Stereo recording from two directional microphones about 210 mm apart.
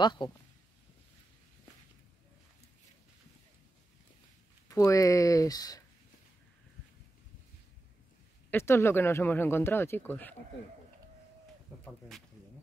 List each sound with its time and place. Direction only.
0.0 s speech: 20° left (ahead or behind)
4.6 s speech: 15° left (ahead or behind)
8.5 s speech: 10° left (ahead or behind)